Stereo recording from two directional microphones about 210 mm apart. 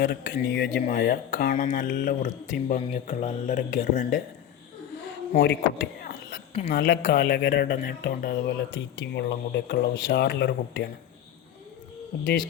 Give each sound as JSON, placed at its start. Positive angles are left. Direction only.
{"t": 0.0, "sound": "speech", "side_deg": 50}
{"t": 5.4, "sound": "a sound", "side_deg": 55}
{"t": 6.7, "sound": "speech", "side_deg": 55}